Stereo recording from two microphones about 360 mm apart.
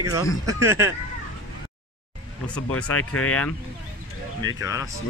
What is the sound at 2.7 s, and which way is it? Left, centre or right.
Speech, left.